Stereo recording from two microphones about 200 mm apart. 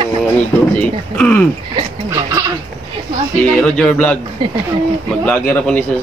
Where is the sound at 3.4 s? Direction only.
5° left (ahead or behind).